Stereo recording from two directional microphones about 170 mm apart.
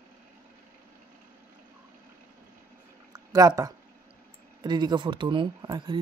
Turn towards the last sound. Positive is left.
turn(degrees=-25)  # may be behind; listen again after turning